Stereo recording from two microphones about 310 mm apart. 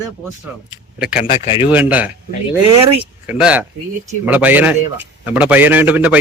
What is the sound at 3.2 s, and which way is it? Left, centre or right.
A man's voice, centre.